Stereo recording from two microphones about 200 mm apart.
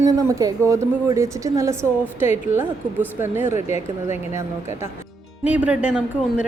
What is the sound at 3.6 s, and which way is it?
Speech, 35° left (ahead or behind).